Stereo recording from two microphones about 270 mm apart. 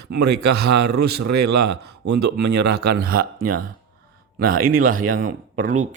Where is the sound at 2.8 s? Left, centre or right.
Right.